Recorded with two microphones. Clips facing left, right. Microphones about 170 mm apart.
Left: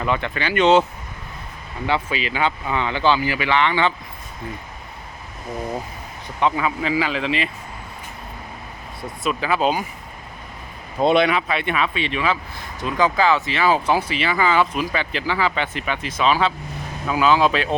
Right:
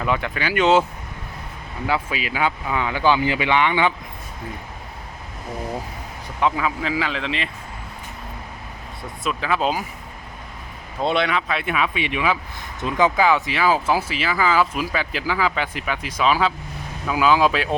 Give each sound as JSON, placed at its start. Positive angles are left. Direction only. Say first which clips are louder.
{"t": 0.0, "sound": "speech", "louder": "even", "side_deg": -5}
{"t": 1.9, "sound": "speech", "louder": "left 1 dB", "side_deg": -5}
{"t": 3.2, "sound": "speech", "louder": "right 1 dB", "side_deg": -20}
{"t": 6.4, "sound": "speech", "louder": "left 1 dB", "side_deg": 0}
{"t": 9.2, "sound": "speech", "louder": "left 2 dB", "side_deg": 0}
{"t": 11.0, "sound": "speech", "louder": "left 4 dB", "side_deg": 15}